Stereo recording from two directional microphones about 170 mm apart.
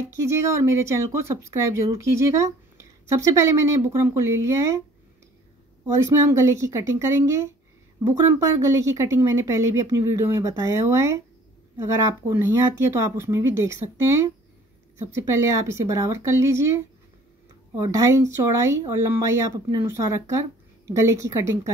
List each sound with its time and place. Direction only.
0.1 s speech: 15° right (ahead or behind)
5.9 s speech: 15° right (ahead or behind)